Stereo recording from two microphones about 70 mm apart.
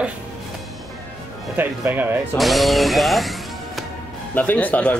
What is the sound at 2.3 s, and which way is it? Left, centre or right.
Speech, centre.